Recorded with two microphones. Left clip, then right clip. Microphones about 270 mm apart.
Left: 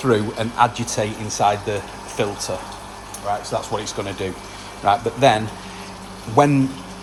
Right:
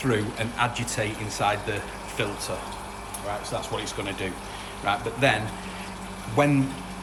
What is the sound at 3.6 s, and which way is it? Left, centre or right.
Speech, left.